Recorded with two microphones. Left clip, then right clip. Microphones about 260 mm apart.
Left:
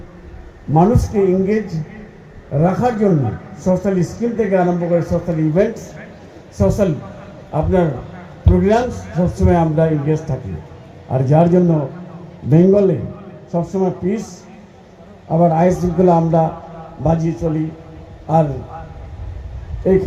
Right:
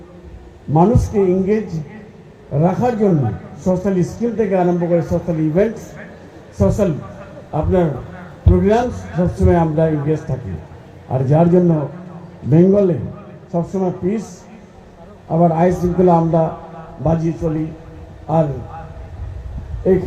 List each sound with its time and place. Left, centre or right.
0.7 s speech: left
15.3 s speech: left
19.9 s speech: left